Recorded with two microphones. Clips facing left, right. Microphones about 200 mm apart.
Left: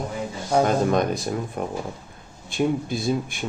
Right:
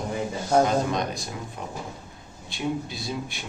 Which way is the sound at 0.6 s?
55° left (ahead or behind).